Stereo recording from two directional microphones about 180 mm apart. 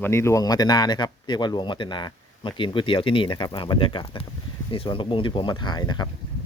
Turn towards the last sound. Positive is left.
turn(degrees=25)  # may be behind; listen again after turning